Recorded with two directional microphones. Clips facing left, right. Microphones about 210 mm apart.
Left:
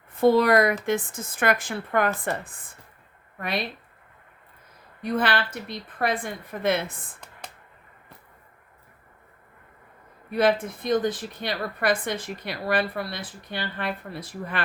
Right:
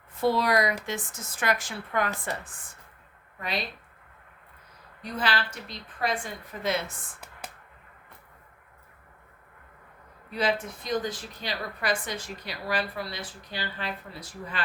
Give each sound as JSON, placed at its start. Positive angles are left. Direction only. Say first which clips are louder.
{"t": 0.2, "sound": "a woman's voice", "louder": "left 6 dB", "side_deg": 55}
{"t": 5.0, "sound": "a woman's voice", "louder": "left 5 dB", "side_deg": 55}
{"t": 10.3, "sound": "a woman's voice", "louder": "left 6 dB", "side_deg": 55}